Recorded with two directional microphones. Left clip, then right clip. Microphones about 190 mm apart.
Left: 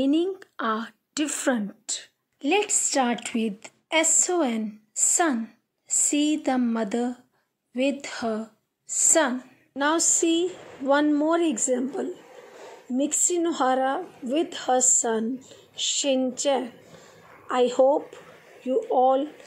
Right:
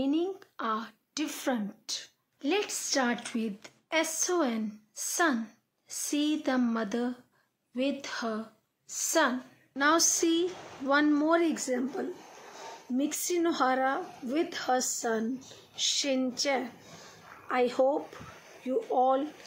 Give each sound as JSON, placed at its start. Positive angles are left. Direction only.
{"t": 0.0, "sound": "a woman's voice", "side_deg": 30}